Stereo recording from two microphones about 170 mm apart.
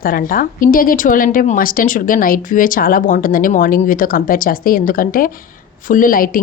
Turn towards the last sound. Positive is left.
turn(degrees=55)  # may be behind; listen again after turning